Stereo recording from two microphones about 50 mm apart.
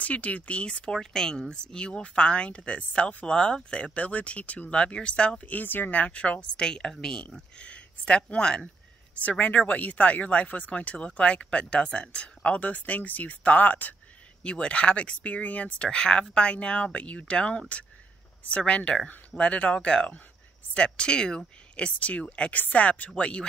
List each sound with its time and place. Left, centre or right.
0.0 s speech: left
0.9 s speech: centre
5.4 s speech: left
14.4 s speech: left
15.9 s speech: centre